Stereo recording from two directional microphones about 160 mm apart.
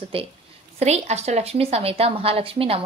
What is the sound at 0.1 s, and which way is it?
A woman's voice, 35° right (ahead or behind).